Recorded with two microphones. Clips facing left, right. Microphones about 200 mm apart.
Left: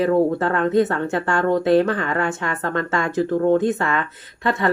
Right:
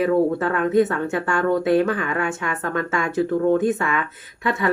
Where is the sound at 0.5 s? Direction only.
10° right (ahead or behind).